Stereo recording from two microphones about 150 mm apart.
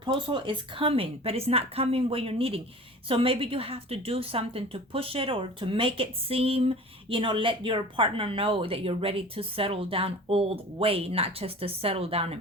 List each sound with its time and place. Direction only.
0.0 s a woman's voice: 35° right (ahead or behind)